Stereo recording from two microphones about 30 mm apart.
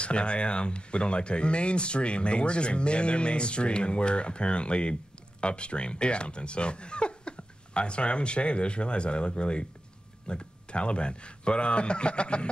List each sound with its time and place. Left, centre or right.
0.0 s speech: left